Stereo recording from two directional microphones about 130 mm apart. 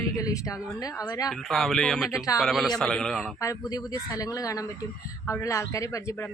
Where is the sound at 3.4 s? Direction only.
25° left (ahead or behind).